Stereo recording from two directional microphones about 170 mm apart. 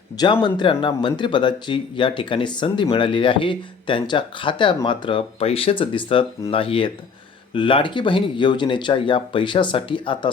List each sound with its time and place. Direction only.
0.4 s speech: 30° left (ahead or behind)